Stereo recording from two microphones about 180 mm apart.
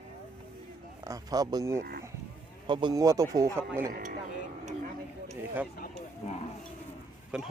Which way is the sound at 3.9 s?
50° right (ahead or behind).